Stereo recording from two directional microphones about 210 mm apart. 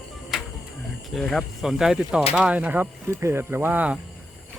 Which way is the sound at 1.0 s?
Centre (ahead or behind).